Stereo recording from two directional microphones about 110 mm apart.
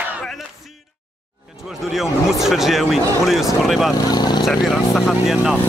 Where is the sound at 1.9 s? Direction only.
5° right (ahead or behind).